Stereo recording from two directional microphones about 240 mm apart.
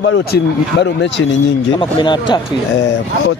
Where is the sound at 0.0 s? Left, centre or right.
Left.